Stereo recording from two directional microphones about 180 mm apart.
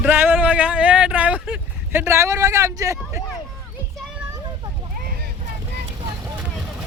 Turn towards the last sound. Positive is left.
turn(degrees=0)  # may be behind; listen again after turning